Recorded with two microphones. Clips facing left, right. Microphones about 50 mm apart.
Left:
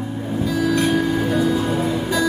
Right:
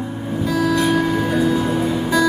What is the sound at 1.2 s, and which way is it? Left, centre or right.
Music, centre.